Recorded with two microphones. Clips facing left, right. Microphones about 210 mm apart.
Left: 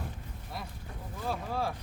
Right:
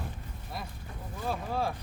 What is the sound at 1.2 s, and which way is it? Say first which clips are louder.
Speech: right 1 dB; 20° right (ahead or behind).